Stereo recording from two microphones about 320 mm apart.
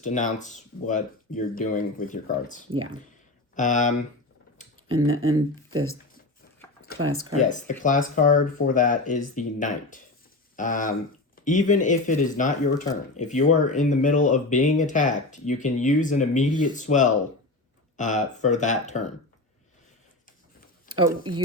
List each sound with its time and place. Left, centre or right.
0.0 s speech: left
4.9 s speech: right
7.3 s speech: left
21.1 s speech: centre